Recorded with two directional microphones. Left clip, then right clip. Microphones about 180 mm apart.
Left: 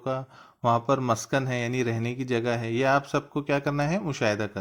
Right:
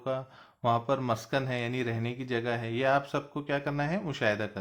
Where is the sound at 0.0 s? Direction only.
20° left (ahead or behind).